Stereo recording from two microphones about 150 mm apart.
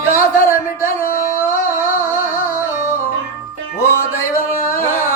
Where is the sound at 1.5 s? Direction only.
15° left (ahead or behind).